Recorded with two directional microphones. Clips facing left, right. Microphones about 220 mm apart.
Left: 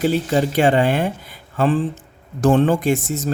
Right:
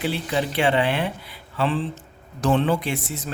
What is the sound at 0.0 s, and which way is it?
Speech, 45° left (ahead or behind).